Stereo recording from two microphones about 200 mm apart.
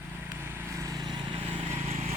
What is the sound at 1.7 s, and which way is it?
Vehicle, 30° right (ahead or behind).